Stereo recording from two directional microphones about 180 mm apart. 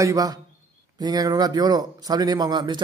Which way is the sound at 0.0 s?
20° right (ahead or behind).